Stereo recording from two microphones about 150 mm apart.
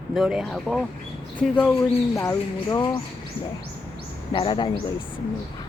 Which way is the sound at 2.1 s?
20° left (ahead or behind).